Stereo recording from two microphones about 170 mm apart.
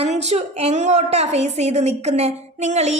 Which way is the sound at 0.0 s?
40° right (ahead or behind).